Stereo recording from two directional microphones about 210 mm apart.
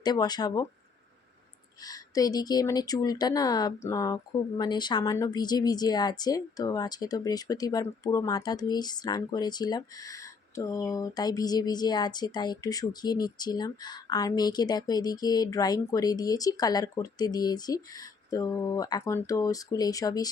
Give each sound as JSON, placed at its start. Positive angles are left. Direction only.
{"t": 0.0, "sound": "speech", "side_deg": 20}
{"t": 1.8, "sound": "speech", "side_deg": 15}